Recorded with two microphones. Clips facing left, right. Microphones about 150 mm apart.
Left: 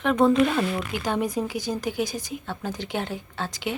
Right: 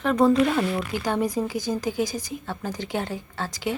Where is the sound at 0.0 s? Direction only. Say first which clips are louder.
Even; centre (ahead or behind).